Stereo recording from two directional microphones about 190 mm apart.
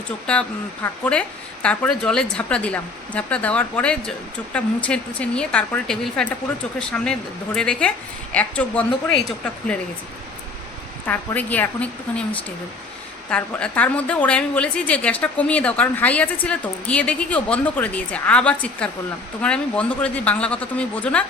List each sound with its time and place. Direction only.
0.3 s a woman's voice: 5° left (ahead or behind)
11.0 s a woman's voice: 10° left (ahead or behind)